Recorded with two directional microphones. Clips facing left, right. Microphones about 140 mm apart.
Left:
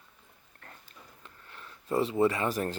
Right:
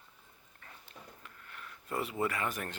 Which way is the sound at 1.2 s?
30° left (ahead or behind).